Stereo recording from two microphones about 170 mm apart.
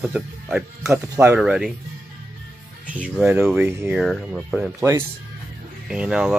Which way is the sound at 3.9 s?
Centre (ahead or behind).